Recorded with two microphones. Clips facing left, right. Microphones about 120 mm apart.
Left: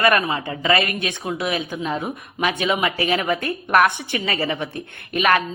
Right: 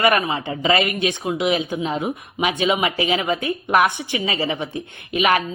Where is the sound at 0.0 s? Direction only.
20° right (ahead or behind).